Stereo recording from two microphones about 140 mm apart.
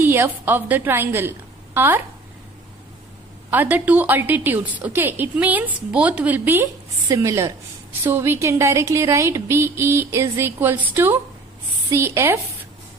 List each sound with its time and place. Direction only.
0.0 s a woman's voice: 15° right (ahead or behind)
3.4 s a woman's voice: 10° right (ahead or behind)